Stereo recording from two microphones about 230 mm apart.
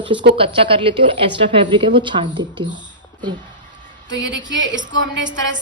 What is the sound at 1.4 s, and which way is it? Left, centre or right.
Speech, right.